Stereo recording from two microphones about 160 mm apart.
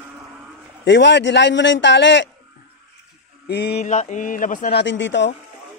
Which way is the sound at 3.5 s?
90° left.